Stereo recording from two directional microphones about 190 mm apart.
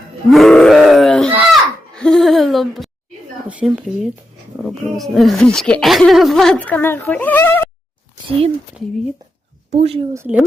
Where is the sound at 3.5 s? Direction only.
5° right (ahead or behind); by 7.7 s 10° left (ahead or behind).